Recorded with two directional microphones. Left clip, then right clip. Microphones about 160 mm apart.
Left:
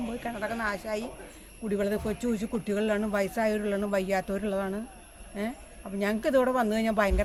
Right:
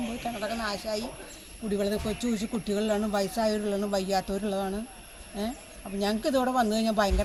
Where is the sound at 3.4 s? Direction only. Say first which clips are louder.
Even; 40° left (ahead or behind).